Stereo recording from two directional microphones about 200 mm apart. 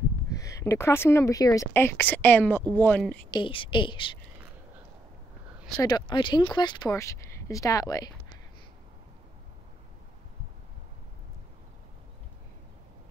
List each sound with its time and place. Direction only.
0.3 s speech: 15° left (ahead or behind)
3.3 s speech: 25° left (ahead or behind)
5.8 s speech: 20° left (ahead or behind)